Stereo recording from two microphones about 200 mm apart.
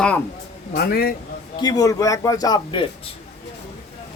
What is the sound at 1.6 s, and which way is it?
A man's voice, 20° left (ahead or behind).